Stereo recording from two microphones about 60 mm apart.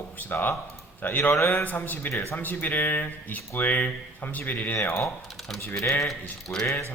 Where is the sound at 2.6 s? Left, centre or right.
Left.